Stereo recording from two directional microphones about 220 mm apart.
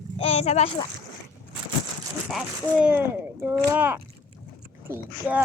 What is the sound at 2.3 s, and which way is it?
Speech, centre (ahead or behind).